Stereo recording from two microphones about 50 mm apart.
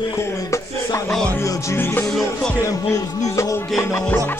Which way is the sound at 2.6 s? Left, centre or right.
Left.